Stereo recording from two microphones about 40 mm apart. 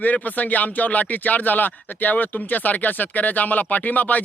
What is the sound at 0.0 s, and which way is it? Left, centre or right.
Speech, left.